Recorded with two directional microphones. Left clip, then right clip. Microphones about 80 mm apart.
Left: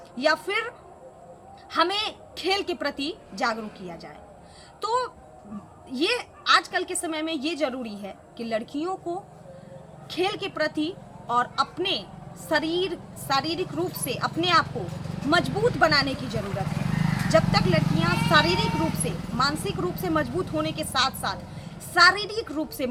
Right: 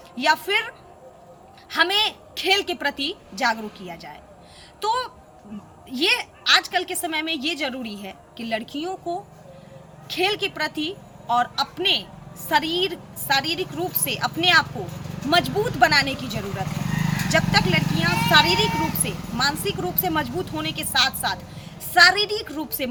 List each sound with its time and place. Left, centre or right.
0.2 s speech: left
1.7 s speech: left
16.7 s vehicle: centre
17.3 s speech: left